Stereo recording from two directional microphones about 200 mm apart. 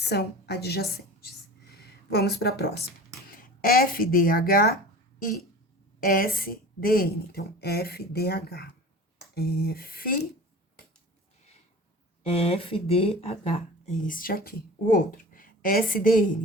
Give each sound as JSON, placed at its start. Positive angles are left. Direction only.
{"t": 0.0, "sound": "a woman's voice", "side_deg": 55}
{"t": 6.0, "sound": "speech", "side_deg": 45}
{"t": 12.2, "sound": "speech", "side_deg": 30}